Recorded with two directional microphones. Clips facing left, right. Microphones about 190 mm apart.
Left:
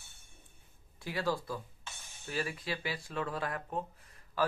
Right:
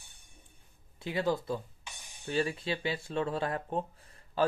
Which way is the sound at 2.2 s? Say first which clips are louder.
Right 6 dB; 30° right (ahead or behind).